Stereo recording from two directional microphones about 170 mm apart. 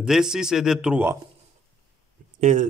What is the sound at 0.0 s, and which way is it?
Speech, 5° right (ahead or behind).